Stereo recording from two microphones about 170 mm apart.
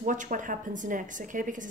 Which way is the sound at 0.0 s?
50° right (ahead or behind).